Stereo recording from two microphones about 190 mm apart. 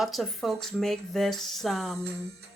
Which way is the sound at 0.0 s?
Centre (ahead or behind).